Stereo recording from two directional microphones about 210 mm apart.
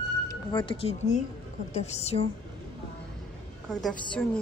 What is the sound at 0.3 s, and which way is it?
A woman's voice, 20° left (ahead or behind).